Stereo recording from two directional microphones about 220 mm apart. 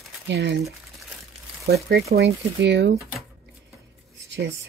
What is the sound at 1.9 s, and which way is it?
Speech, 50° right (ahead or behind).